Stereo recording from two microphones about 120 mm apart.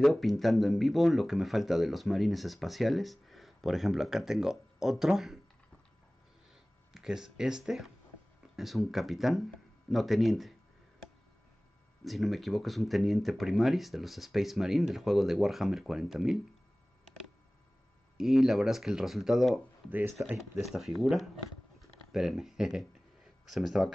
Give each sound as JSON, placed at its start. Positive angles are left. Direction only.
{"t": 0.0, "sound": "speech", "side_deg": 0}
{"t": 6.9, "sound": "speech", "side_deg": -5}
{"t": 12.0, "sound": "speech", "side_deg": 0}
{"t": 18.1, "sound": "speech", "side_deg": -5}
{"t": 19.9, "sound": "speech", "side_deg": -15}
{"t": 20.3, "sound": "speech", "side_deg": 0}